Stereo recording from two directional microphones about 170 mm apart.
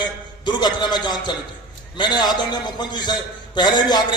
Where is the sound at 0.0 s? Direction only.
25° left (ahead or behind).